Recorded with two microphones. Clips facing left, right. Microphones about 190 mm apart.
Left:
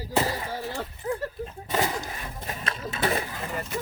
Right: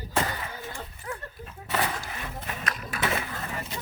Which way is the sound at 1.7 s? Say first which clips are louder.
Left 2 dB; 25° left (ahead or behind).